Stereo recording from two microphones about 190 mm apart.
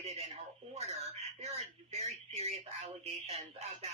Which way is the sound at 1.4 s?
35° right (ahead or behind).